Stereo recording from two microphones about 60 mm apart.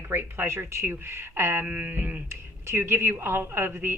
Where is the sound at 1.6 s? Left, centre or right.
Right.